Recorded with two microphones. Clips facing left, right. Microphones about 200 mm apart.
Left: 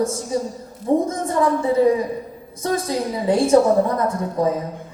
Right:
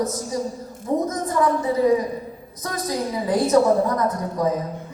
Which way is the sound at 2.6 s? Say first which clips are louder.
Left 4 dB; 25° left (ahead or behind).